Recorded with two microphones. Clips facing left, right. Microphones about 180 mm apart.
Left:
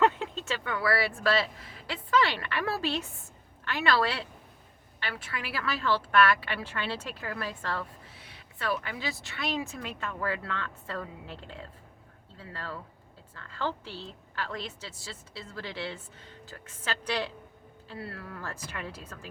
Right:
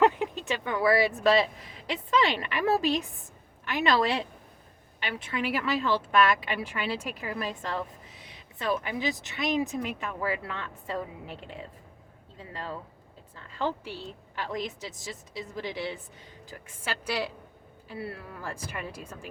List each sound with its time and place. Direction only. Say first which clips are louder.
0.0 s a woman's voice: right 2 dB; 15° right (ahead or behind)